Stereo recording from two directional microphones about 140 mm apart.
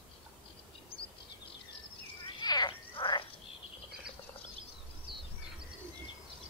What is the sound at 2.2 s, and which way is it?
Frog, 30° left (ahead or behind).